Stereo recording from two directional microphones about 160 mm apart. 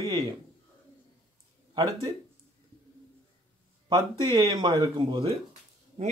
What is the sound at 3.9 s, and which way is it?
A man's voice, 25° right (ahead or behind).